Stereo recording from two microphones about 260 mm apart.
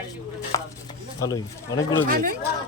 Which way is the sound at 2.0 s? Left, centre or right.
Right.